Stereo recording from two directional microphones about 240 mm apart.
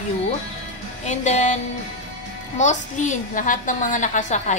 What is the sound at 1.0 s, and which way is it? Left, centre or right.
Speech, left.